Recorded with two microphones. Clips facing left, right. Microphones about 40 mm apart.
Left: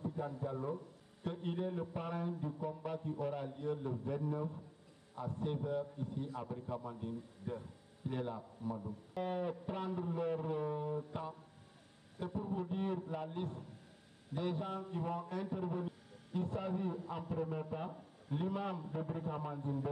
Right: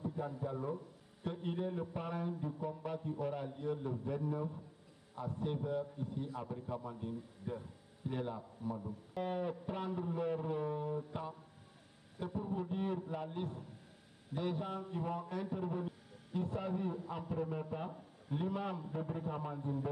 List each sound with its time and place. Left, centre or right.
0.0 s a man's voice: centre